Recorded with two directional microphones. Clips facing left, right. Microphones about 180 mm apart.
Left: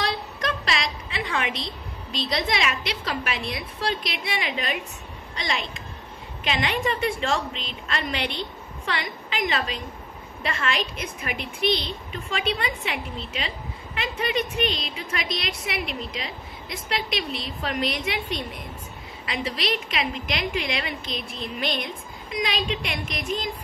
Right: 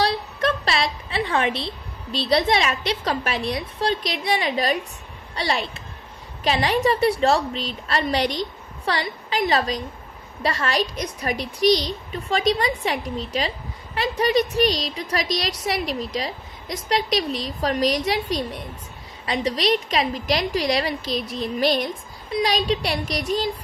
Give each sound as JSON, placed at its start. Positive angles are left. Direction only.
{"t": 0.4, "sound": "a woman's voice", "side_deg": -30}